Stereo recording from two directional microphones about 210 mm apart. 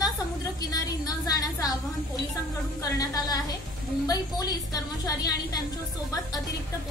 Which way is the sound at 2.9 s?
15° left (ahead or behind).